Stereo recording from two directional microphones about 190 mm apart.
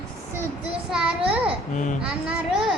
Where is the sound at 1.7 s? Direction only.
40° left (ahead or behind).